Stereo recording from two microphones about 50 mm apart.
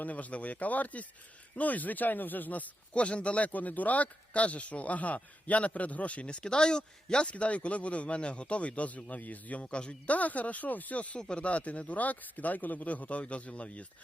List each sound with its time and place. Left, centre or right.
0.0 s speech: left